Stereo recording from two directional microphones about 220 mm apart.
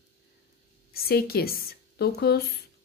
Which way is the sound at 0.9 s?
45° left (ahead or behind).